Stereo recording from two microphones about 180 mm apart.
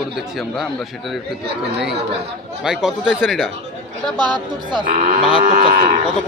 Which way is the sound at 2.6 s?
5° right (ahead or behind).